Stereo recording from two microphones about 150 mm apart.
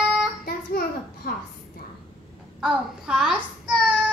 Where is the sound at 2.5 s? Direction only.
5° right (ahead or behind).